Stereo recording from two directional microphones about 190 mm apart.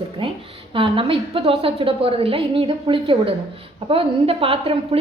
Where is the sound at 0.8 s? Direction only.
30° right (ahead or behind).